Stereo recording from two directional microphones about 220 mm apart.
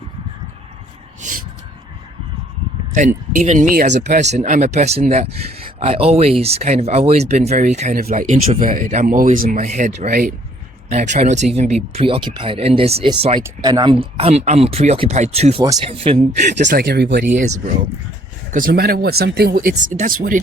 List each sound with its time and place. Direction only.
1.2 s speech: 35° right (ahead or behind)
3.3 s speech: 35° right (ahead or behind)
16.6 s speech: 50° right (ahead or behind)
18.5 s speech: 40° right (ahead or behind)